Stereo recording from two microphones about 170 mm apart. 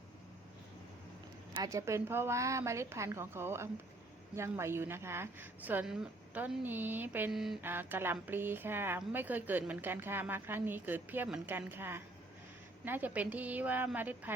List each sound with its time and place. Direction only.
1.5 s a woman's voice: 20° right (ahead or behind); by 7.6 s centre (ahead or behind)
7.6 s a woman's voice: 10° right (ahead or behind)